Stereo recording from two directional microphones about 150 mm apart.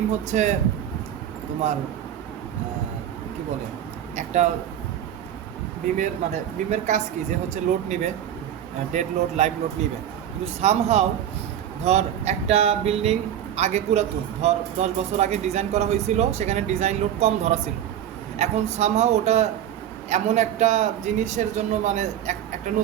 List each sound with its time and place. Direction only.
0.3 s speech: 55° right (ahead or behind)
4.1 s a sound: 50° right (ahead or behind)
6.0 s speech: 50° right (ahead or behind)
10.6 s speech: 45° right (ahead or behind)